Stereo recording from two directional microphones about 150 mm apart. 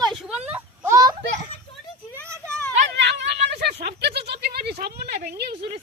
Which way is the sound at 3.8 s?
90° right.